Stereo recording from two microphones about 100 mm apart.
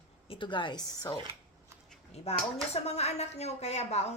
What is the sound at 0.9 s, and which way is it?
Speech, 40° left (ahead or behind).